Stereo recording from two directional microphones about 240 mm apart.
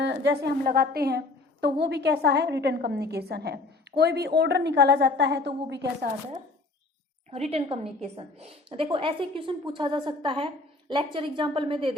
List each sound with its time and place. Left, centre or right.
0.0 s a woman's voice: right
7.3 s a woman's voice: right